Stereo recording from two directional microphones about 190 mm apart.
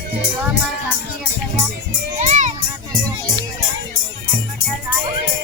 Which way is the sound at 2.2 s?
40° right (ahead or behind).